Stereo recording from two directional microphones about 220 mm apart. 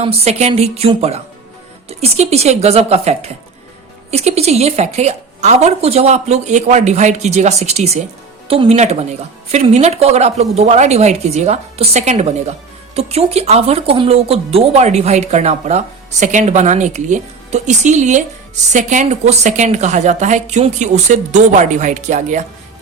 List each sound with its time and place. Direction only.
0.0 s a woman's voice: 30° right (ahead or behind)